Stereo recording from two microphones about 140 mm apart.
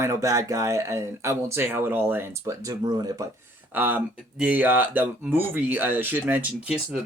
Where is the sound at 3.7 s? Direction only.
10° right (ahead or behind).